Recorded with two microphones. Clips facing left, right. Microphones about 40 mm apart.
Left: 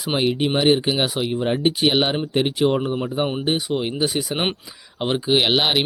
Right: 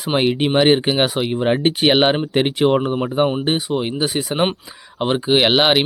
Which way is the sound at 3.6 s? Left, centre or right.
Centre.